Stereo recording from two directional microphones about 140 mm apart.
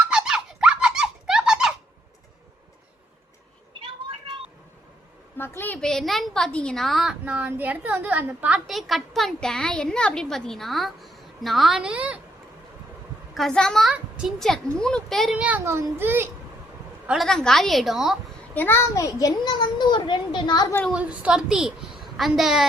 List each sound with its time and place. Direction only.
0.1 s squeak: 5° right (ahead or behind)
3.8 s a sound: 35° right (ahead or behind)
5.4 s a woman's voice: 15° left (ahead or behind); by 12.2 s 10° right (ahead or behind)
13.3 s a woman's voice: 5° left (ahead or behind)
15.4 s a child's voice: 10° right (ahead or behind)
17.1 s a woman's voice: centre (ahead or behind)
18.5 s a child's voice: 15° left (ahead or behind); by 20.7 s 35° left (ahead or behind)
20.9 s a woman's voice: 10° right (ahead or behind)